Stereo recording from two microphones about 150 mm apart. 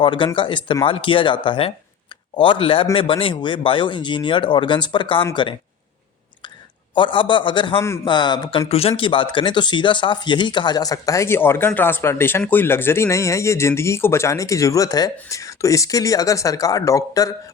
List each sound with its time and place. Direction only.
0.0 s speech: 35° left (ahead or behind)
6.9 s speech: 35° left (ahead or behind)